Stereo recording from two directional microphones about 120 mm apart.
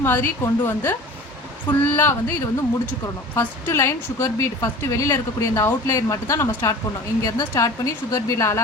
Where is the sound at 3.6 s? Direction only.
25° left (ahead or behind).